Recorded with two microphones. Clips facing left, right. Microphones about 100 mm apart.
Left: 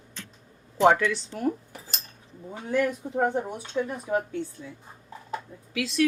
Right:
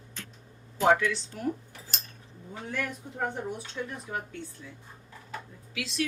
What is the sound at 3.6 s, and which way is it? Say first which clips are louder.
Speech: left 7 dB; 30° left (ahead or behind).